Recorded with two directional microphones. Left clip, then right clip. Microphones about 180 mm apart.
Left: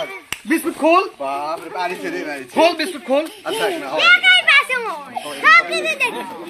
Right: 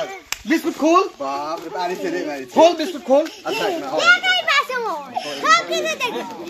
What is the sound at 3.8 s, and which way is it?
A child's voice, 35° right (ahead or behind).